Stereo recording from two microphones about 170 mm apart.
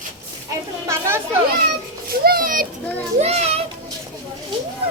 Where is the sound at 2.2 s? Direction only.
60° right (ahead or behind).